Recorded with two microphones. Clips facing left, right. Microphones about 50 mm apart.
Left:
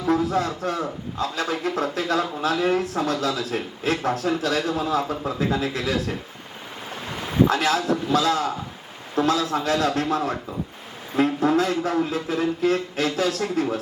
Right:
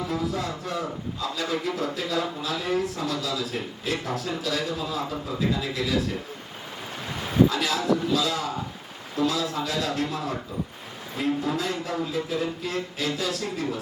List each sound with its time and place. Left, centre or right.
0.1 s a sound: left
1.2 s speech: left
7.4 s speech: left